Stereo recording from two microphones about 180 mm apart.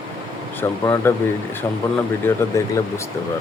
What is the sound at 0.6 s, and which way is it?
Speech, 15° left (ahead or behind).